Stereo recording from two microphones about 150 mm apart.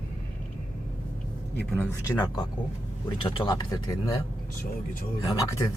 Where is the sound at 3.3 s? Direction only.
30° left (ahead or behind).